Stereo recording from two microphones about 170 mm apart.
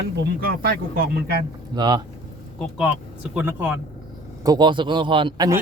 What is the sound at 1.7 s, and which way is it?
Speech, 25° right (ahead or behind).